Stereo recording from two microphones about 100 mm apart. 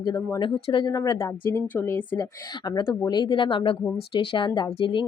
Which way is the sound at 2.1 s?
45° left (ahead or behind).